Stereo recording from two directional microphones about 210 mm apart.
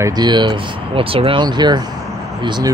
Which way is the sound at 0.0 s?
20° right (ahead or behind).